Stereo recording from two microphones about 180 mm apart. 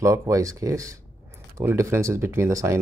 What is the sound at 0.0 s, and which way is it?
Speech, 15° right (ahead or behind).